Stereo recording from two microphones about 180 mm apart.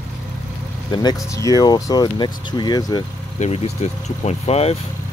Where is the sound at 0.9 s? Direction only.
20° left (ahead or behind).